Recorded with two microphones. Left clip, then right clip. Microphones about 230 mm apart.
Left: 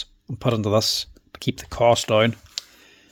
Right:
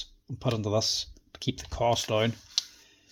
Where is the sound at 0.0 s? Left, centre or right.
Left.